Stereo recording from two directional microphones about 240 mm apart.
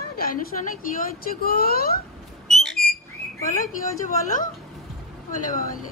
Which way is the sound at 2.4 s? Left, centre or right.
Centre.